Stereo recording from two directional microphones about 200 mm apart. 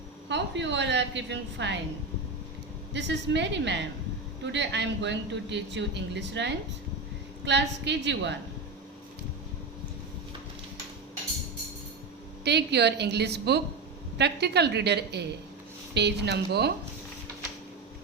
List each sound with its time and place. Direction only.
0.3 s speech: 60° right (ahead or behind)
2.9 s speech: 60° right (ahead or behind)
12.5 s speech: 55° right (ahead or behind)